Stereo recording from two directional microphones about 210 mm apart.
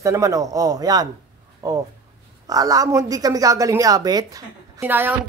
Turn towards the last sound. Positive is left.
turn(degrees=-10)  # may be behind; listen again after turning